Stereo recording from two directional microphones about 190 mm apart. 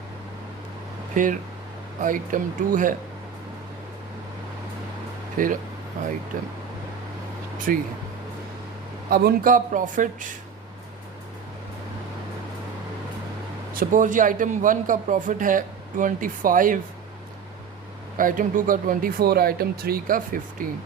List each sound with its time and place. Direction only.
1.1 s a man's voice: 45° right (ahead or behind)
5.4 s a man's voice: 45° right (ahead or behind)
7.7 s a man's voice: 50° right (ahead or behind)
9.0 s a man's voice: 55° right (ahead or behind)
13.7 s a man's voice: 45° right (ahead or behind)
18.2 s a man's voice: 45° right (ahead or behind)